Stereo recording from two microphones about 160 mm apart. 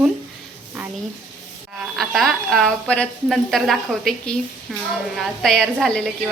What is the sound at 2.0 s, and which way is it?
A woman's voice, centre (ahead or behind).